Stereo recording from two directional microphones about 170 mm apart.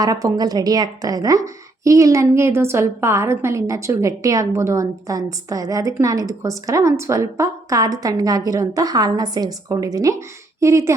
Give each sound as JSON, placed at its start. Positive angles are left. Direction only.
{"t": 0.0, "sound": "a woman's voice", "side_deg": -20}